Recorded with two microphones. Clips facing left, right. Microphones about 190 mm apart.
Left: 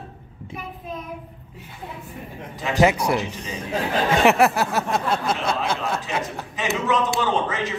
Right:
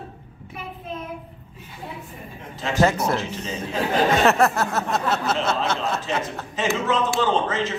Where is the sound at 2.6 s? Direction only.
15° left (ahead or behind).